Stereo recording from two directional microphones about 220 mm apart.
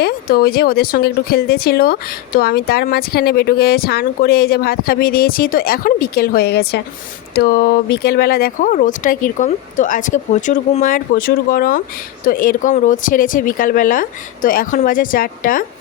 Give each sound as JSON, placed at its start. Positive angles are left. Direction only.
{"t": 0.0, "sound": "speech", "side_deg": 45}